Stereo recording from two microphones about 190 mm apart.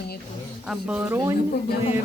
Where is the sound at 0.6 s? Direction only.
5° right (ahead or behind).